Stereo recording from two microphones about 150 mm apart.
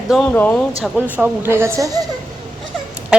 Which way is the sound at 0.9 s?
10° right (ahead or behind).